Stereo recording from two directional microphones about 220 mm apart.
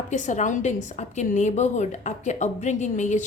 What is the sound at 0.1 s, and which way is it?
A woman's voice, 35° left (ahead or behind).